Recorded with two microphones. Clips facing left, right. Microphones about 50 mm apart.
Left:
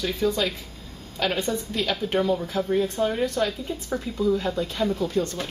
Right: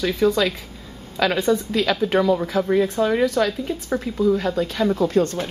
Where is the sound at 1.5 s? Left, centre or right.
Right.